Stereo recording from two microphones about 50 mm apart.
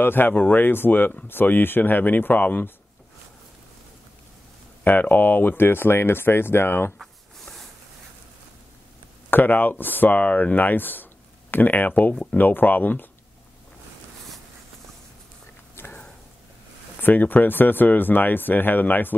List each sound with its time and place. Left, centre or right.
0.0 s speech: left
4.8 s speech: left
7.0 s a sound: centre
9.3 s speech: left
15.8 s a sound: left
17.0 s speech: left